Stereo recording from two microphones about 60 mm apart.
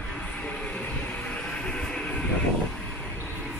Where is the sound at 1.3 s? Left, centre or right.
Left.